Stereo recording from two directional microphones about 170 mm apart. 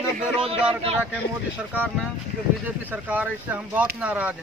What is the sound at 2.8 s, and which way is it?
Speech, 10° right (ahead or behind).